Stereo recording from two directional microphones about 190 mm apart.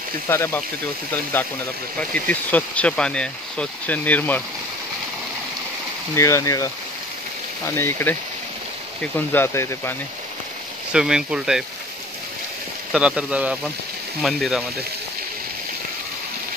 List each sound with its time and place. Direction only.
0.3 s speech: 10° left (ahead or behind)
2.0 s speech: 5° left (ahead or behind)
6.1 s speech: 15° left (ahead or behind)
10.9 s speech: 5° right (ahead or behind)
12.9 s speech: 5° right (ahead or behind)